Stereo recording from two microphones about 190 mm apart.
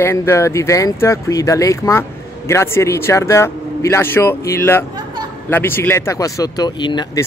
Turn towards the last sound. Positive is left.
turn(degrees=25)  # may be behind; listen again after turning